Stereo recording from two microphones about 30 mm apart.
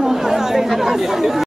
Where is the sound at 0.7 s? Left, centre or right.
Centre.